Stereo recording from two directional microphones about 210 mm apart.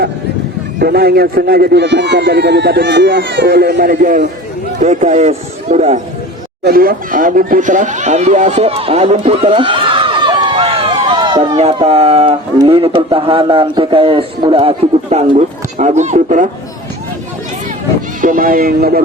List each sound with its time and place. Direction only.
0.8 s a man's voice: 45° right (ahead or behind); by 6.0 s 30° right (ahead or behind)
6.7 s speech: 45° right (ahead or behind)
18.2 s a man's voice: 40° right (ahead or behind)